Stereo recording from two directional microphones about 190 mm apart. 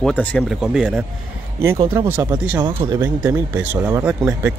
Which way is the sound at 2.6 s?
20° right (ahead or behind).